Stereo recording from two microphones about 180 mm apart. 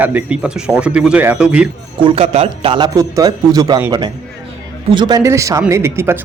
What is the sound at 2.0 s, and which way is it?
A man's voice, 30° right (ahead or behind).